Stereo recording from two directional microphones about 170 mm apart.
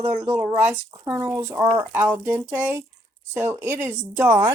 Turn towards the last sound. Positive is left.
turn(degrees=-15)  # may be behind; listen again after turning